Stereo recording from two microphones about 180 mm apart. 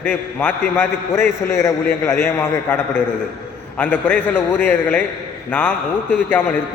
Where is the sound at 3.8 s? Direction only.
5° left (ahead or behind).